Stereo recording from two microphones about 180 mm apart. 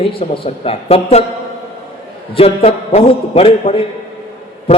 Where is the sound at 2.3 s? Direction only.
35° left (ahead or behind).